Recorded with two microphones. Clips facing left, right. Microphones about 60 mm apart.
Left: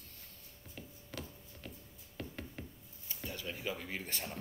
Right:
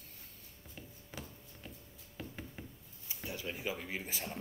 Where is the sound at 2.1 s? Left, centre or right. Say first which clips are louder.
Left 1 dB; centre.